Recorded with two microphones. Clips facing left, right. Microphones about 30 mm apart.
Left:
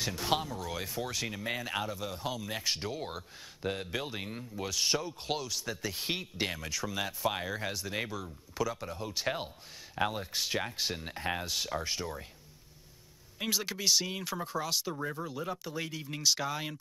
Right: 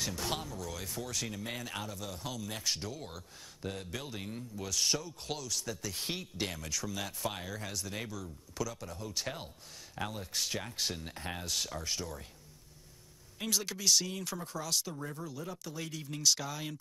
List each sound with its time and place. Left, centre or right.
0.0 s speech: left
10.3 s speech: centre
13.4 s speech: centre